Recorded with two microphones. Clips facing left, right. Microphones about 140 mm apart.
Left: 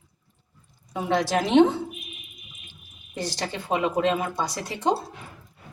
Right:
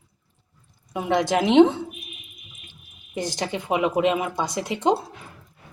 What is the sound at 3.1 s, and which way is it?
Speech, 20° right (ahead or behind).